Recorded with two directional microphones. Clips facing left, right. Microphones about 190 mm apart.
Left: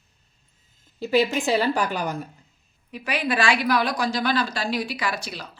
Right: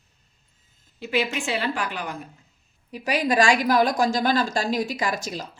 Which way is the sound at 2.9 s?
40° right (ahead or behind).